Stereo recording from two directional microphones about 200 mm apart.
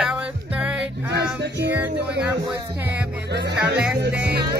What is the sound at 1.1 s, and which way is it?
Music, 60° right (ahead or behind).